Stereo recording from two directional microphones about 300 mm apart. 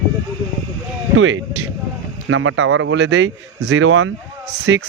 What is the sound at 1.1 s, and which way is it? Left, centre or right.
Speech, right.